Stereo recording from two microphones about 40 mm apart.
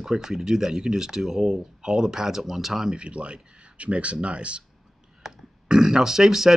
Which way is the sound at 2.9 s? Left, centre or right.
Right.